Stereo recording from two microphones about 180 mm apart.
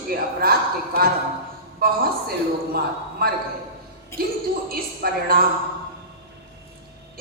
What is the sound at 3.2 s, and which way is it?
Speech, 55° right (ahead or behind).